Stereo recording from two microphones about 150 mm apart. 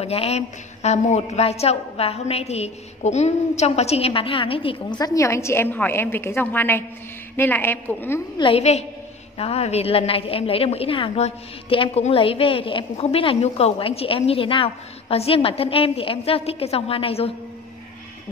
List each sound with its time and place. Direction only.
0.0 s a woman's voice: 45° left (ahead or behind); by 8.2 s 15° left (ahead or behind)
8.4 s a woman's voice: 40° left (ahead or behind)